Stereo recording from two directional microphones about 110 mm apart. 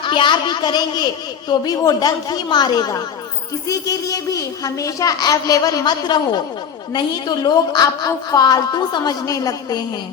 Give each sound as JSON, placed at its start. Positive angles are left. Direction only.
{"t": 0.0, "sound": "a man's voice", "side_deg": 45}